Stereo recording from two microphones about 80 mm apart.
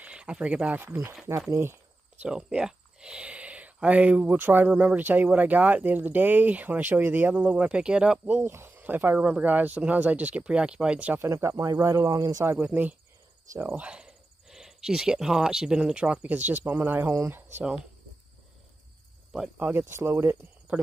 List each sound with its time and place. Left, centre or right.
0.0 s speech: centre
1.5 s speech: right
2.2 s speech: centre
8.5 s speech: right; by 11.1 s centre
11.1 s speech: right
12.5 s speech: right
17.3 s cricket: right
19.5 s speech: right
20.7 s speech: centre